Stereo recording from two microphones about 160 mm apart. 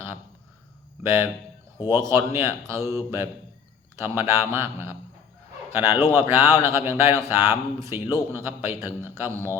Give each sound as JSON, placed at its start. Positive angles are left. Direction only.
{"t": 1.0, "sound": "speech", "side_deg": -15}